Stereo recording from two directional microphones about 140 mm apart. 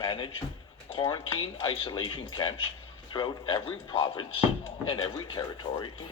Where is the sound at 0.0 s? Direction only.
35° left (ahead or behind).